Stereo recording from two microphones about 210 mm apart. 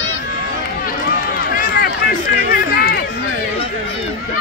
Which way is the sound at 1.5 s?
45° left (ahead or behind).